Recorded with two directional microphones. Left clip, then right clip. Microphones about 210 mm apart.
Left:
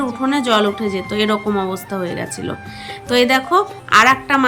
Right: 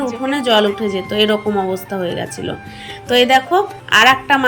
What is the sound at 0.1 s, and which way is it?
Speech, 5° left (ahead or behind).